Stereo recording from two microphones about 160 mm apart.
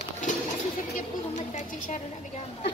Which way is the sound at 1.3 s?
50° left (ahead or behind).